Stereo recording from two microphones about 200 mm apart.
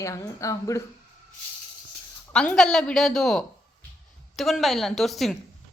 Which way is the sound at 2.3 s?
5° left (ahead or behind).